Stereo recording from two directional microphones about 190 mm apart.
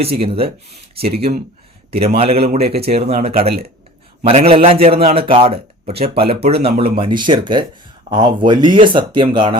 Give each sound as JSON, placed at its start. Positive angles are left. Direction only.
{"t": 0.2, "sound": "a man's voice", "side_deg": -30}
{"t": 1.9, "sound": "a man's voice", "side_deg": -30}